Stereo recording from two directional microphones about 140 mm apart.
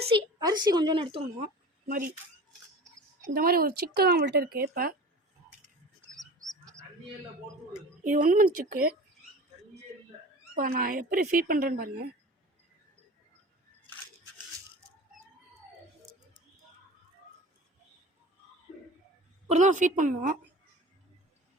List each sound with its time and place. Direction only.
0.2 s a woman's voice: 30° right (ahead or behind)
1.9 s speech: 80° right
3.2 s speech: 90° right
6.1 s bird: 25° right (ahead or behind)
8.0 s speech: 70° right (ahead or behind); by 9.0 s 85° right
10.5 s speech: 90° right
19.5 s a woman's voice: 55° right (ahead or behind)